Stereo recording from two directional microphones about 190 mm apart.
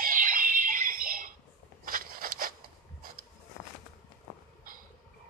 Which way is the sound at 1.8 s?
50° right (ahead or behind).